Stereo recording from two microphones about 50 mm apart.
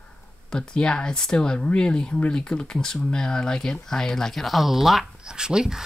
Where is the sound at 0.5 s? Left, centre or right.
Centre.